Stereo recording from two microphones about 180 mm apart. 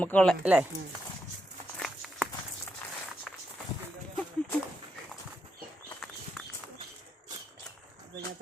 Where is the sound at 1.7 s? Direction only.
Centre (ahead or behind).